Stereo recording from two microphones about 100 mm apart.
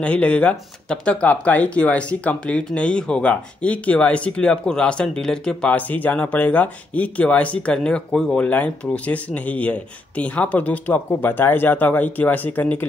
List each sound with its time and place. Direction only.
0.0 s speech: 10° left (ahead or behind)